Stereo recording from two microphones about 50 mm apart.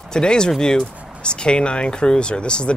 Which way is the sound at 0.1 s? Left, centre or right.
Centre.